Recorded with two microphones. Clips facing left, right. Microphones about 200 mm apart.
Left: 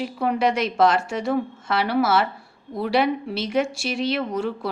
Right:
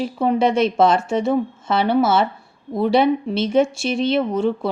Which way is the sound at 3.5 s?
25° right (ahead or behind).